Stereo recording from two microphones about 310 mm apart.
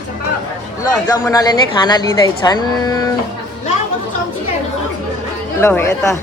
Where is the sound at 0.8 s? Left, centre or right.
Centre.